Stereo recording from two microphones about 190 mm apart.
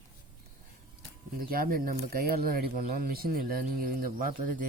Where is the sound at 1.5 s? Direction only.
50° right (ahead or behind).